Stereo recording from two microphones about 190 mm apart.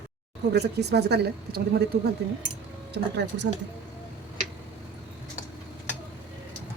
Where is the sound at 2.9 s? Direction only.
65° right (ahead or behind).